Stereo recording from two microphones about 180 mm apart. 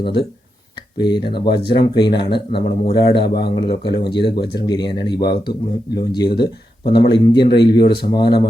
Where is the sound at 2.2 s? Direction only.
65° left (ahead or behind).